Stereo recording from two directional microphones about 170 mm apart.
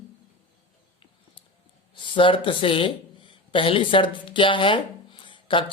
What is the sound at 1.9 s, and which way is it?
Speech, 30° left (ahead or behind).